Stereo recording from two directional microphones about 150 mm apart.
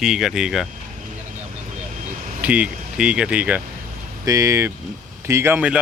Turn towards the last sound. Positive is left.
turn(degrees=-10)  # may be behind; listen again after turning